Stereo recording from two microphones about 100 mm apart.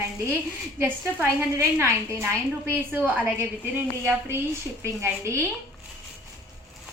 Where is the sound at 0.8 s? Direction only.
25° right (ahead or behind).